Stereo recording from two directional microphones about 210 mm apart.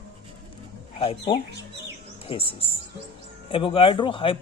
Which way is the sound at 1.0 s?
30° left (ahead or behind).